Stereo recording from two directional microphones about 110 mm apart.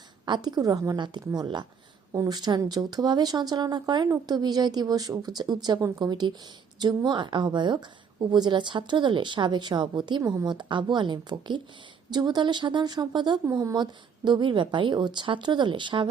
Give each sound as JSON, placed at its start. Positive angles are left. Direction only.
{"t": 0.3, "sound": "a woman's voice", "side_deg": -40}
{"t": 14.3, "sound": "a woman's voice", "side_deg": -45}